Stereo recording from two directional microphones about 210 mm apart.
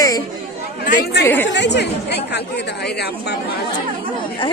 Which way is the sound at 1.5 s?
55° left (ahead or behind).